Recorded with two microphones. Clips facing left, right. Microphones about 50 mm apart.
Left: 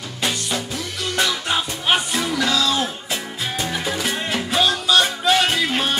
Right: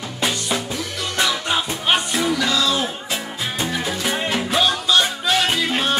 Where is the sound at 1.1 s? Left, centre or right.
Centre.